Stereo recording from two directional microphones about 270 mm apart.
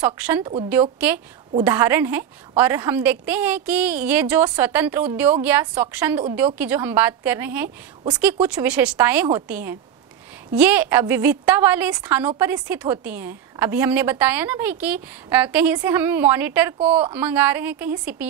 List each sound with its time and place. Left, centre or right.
0.0 s speech: centre
0.4 s speech: centre
0.9 s a woman's voice: centre